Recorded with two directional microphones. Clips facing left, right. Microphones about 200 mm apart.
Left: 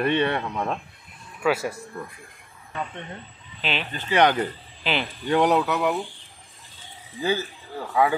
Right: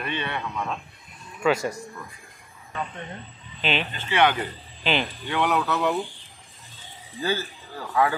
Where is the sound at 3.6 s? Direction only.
Centre (ahead or behind).